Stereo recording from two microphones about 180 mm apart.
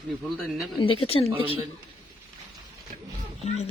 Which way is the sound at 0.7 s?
30° left (ahead or behind).